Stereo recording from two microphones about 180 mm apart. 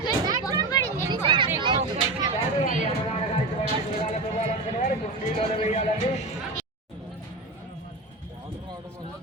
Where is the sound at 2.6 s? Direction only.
40° left (ahead or behind).